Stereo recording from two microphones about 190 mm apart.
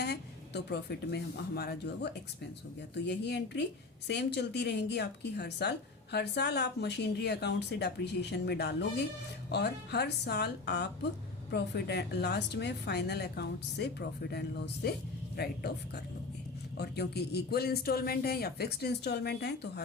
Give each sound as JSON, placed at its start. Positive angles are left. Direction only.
{"t": 0.0, "sound": "a woman's voice", "side_deg": 60}
{"t": 16.7, "sound": "a woman's voice", "side_deg": 60}